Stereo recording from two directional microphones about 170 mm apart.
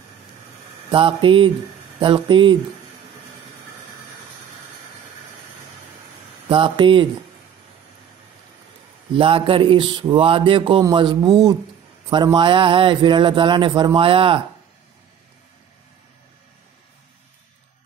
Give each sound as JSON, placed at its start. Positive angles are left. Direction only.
{"t": 0.9, "sound": "a sound", "side_deg": -30}
{"t": 2.0, "sound": "speech", "side_deg": -25}
{"t": 6.5, "sound": "speech", "side_deg": -30}
{"t": 9.1, "sound": "speech", "side_deg": -30}